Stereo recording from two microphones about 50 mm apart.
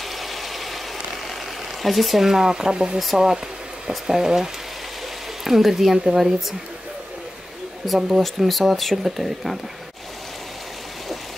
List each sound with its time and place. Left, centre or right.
0.2 s ratchet: centre
1.8 s speech: centre
7.8 s speech: centre